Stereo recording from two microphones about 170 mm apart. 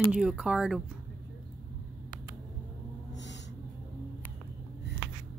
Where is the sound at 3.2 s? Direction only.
90° left.